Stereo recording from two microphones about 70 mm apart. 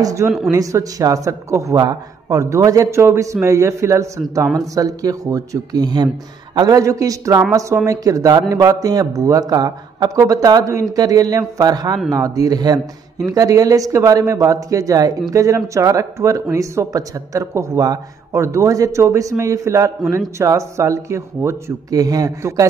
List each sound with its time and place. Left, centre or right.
0.0 s speech: right
1.8 s speech: right
4.6 s a man's voice: right
6.8 s speech: right
12.1 s speech: right
21.9 s speech: right